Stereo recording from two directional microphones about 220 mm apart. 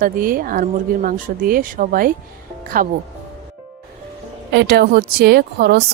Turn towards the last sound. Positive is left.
turn(degrees=-45)  # may be behind; listen again after turning